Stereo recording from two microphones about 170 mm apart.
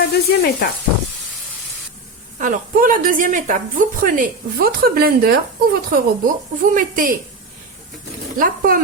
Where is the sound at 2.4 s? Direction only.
50° right (ahead or behind).